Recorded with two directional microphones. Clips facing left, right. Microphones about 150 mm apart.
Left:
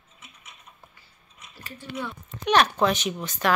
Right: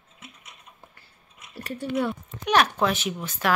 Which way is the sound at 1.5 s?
70° right (ahead or behind).